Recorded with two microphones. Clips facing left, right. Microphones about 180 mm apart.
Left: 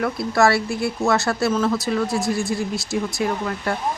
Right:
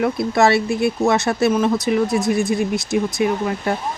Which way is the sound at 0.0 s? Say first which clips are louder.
Right 2 dB; 20° right (ahead or behind).